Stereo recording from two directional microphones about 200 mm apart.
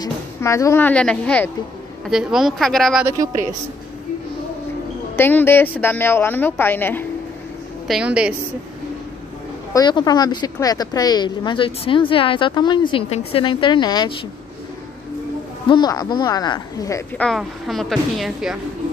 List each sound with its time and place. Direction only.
0.0 s speech: 15° left (ahead or behind); by 3.1 s centre (ahead or behind)
3.1 s a woman's voice: 15° right (ahead or behind)
5.1 s a woman's voice: 10° left (ahead or behind)
7.9 s speech: 5° right (ahead or behind)
9.8 s speech: 20° left (ahead or behind)
15.7 s speech: 20° left (ahead or behind)
17.2 s speech: centre (ahead or behind)